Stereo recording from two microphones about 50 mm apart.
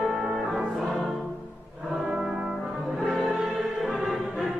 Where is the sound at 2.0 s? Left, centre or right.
Centre.